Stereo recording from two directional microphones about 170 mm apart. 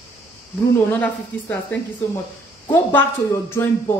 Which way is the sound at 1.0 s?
10° left (ahead or behind).